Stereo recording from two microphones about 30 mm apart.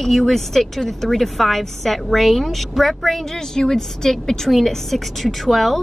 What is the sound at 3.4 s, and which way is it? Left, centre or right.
Speech, centre.